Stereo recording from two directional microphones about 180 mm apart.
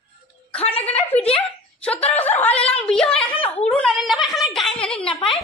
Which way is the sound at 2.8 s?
5° left (ahead or behind).